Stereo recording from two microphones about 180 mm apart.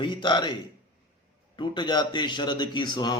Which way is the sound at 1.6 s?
25° left (ahead or behind).